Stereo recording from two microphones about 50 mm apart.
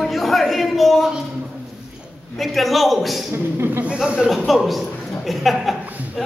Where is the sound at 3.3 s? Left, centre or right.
Right.